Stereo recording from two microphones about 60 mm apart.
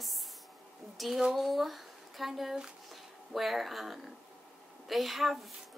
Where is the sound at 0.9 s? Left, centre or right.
Centre.